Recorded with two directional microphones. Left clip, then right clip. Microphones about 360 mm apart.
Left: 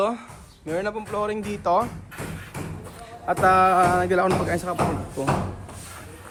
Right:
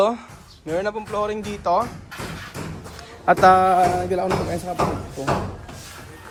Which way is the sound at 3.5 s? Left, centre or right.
Centre.